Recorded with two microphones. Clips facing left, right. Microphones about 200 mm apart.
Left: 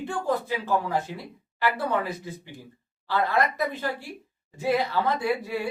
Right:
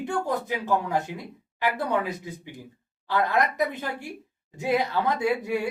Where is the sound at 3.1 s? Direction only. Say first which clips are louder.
Even; 20° right (ahead or behind).